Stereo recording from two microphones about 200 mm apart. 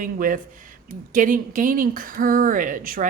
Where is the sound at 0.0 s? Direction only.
45° right (ahead or behind).